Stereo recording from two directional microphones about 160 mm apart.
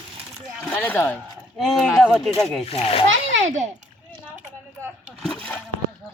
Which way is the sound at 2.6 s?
40° left (ahead or behind).